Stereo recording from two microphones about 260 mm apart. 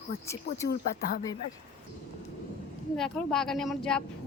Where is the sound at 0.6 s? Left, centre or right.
Left.